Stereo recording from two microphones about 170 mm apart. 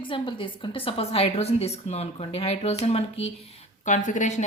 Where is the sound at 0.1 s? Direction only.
30° left (ahead or behind).